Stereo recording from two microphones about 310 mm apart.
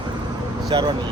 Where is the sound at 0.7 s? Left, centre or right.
Centre.